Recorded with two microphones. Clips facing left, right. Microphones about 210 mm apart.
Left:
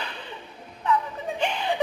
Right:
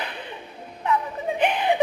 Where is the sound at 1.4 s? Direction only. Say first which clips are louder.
Right 5 dB; 60° right (ahead or behind).